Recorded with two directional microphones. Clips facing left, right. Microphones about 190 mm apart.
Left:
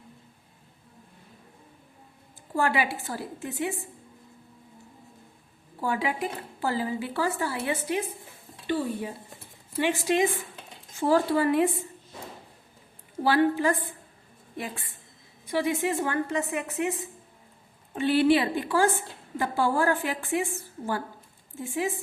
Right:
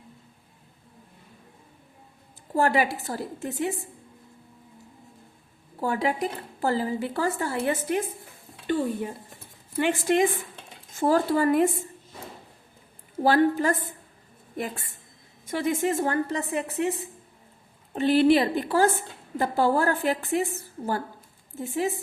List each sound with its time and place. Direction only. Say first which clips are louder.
2.6 s speech: right 3 dB; 40° right (ahead or behind)
5.8 s speech: right 2 dB; 40° right (ahead or behind)
13.2 s speech: right 2 dB; 45° right (ahead or behind)
15.4 s speech: right 1 dB; 45° right (ahead or behind)